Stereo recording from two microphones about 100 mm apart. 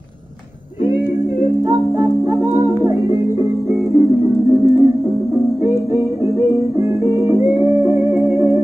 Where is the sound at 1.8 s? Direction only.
25° right (ahead or behind).